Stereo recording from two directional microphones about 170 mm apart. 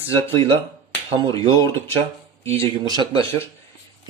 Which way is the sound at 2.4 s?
35° right (ahead or behind).